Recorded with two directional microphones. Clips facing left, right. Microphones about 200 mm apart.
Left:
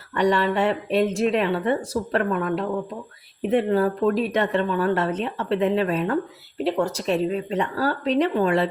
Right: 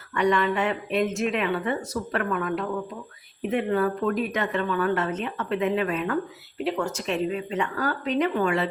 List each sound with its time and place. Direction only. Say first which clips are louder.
0.1 s speech: left 2 dB; 35° left (ahead or behind)